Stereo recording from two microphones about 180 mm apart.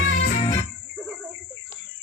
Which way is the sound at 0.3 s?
40° left (ahead or behind).